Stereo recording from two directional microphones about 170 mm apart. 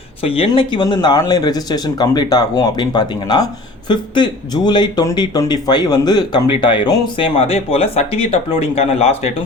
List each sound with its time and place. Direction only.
0.2 s speech: 30° left (ahead or behind)